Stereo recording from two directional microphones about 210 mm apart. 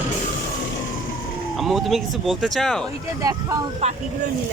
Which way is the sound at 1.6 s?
Centre (ahead or behind).